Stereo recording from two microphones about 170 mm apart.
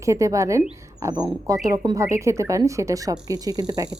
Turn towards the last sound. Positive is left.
turn(degrees=-25)  # may be behind; listen again after turning